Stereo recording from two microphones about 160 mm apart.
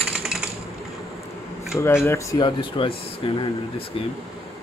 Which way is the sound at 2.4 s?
30° left (ahead or behind).